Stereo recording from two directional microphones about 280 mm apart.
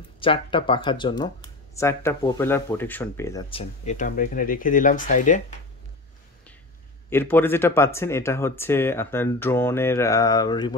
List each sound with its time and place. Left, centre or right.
0.2 s speech: centre
7.1 s speech: centre